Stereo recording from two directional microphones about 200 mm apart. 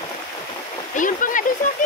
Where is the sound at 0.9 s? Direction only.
40° left (ahead or behind).